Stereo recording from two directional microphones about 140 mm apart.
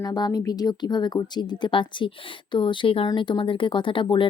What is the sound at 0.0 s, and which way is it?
Speech, 30° left (ahead or behind).